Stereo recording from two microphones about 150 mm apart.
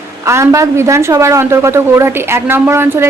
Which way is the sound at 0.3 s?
20° right (ahead or behind).